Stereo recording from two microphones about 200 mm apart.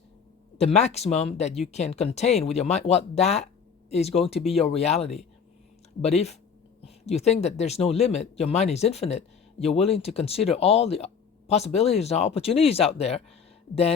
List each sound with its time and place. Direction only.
0.6 s speech: 35° left (ahead or behind)